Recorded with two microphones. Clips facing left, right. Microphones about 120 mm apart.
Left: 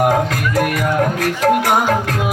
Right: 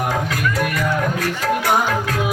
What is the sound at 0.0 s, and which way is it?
Music, 45° left (ahead or behind).